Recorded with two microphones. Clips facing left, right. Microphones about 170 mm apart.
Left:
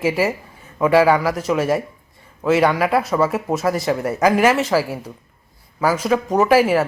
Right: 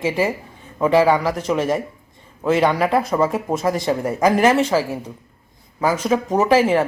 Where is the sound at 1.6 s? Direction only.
10° left (ahead or behind).